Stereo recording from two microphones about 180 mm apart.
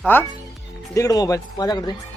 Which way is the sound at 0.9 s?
20° left (ahead or behind).